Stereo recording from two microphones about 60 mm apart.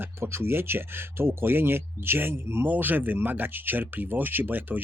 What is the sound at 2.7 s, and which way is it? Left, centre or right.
Speech, right.